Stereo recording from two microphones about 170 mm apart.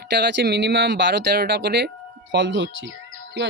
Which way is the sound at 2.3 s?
90° right.